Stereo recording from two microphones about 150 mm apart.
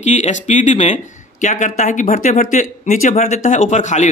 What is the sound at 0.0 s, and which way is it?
A man's voice, 50° left (ahead or behind).